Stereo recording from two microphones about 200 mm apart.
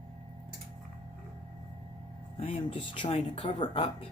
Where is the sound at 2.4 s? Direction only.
30° left (ahead or behind).